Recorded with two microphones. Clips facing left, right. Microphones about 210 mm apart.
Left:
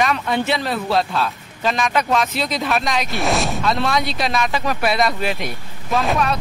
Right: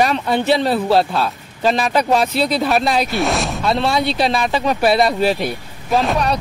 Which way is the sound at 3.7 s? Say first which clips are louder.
Right 5 dB; 30° right (ahead or behind).